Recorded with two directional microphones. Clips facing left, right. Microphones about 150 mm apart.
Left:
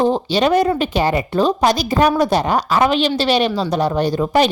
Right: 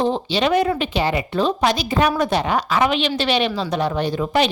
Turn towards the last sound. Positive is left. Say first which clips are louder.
# left 4 dB
turn(degrees=40)  # may be behind; listen again after turning